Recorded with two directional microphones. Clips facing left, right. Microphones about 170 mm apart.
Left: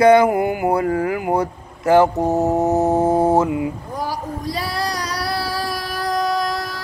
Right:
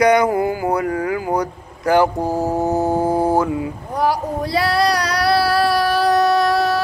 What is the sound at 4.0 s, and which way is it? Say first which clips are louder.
Female singing: right 9 dB; 70° right (ahead or behind).